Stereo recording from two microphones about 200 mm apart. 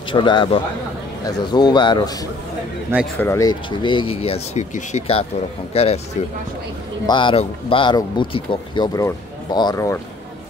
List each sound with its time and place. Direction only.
0.1 s speech: 25° left (ahead or behind)
3.2 s speech: 15° left (ahead or behind); by 5.9 s 30° left (ahead or behind)
7.1 s speech: 25° left (ahead or behind)